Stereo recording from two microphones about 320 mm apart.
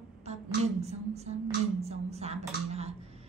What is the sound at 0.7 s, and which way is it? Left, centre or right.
A woman's voice, centre.